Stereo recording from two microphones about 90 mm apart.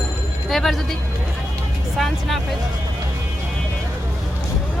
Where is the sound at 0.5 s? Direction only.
5° left (ahead or behind).